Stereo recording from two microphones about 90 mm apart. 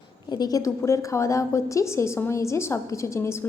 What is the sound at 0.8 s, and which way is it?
A woman's voice, 35° left (ahead or behind).